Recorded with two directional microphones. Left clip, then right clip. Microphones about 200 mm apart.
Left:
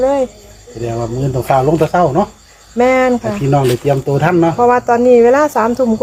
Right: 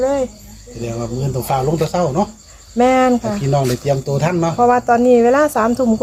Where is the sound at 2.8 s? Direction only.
5° right (ahead or behind).